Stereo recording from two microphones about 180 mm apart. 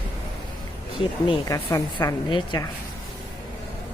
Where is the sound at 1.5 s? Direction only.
20° left (ahead or behind).